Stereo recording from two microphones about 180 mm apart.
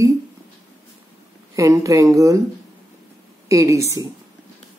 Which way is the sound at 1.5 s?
15° right (ahead or behind).